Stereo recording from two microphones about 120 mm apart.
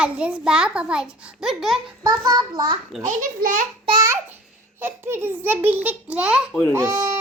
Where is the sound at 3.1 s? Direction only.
90° right.